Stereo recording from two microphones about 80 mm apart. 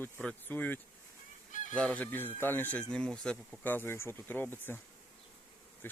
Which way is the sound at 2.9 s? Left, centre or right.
Centre.